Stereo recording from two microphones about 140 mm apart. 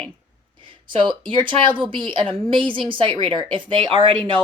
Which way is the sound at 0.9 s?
35° right (ahead or behind).